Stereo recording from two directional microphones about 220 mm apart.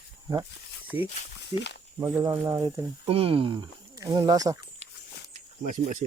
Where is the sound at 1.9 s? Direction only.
15° right (ahead or behind).